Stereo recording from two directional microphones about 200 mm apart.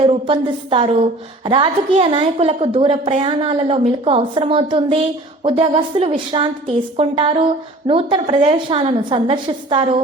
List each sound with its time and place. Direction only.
0.0 s a woman's voice: 25° right (ahead or behind)